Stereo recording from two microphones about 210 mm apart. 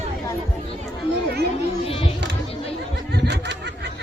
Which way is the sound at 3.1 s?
55° right (ahead or behind).